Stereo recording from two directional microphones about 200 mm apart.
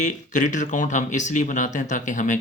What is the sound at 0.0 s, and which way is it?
Speech, 40° left (ahead or behind).